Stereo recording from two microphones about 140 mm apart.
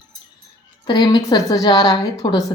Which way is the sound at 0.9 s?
30° left (ahead or behind).